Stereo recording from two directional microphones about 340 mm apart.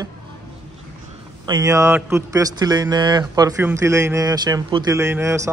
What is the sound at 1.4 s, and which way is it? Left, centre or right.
Speech, centre.